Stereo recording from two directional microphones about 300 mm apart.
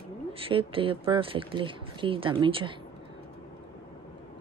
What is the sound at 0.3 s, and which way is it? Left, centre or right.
A woman's voice, centre.